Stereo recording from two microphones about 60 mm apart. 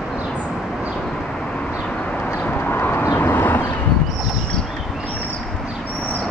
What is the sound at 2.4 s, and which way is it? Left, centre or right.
Vehicle, left.